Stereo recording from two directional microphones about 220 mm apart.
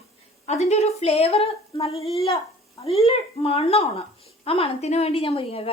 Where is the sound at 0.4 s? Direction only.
30° left (ahead or behind).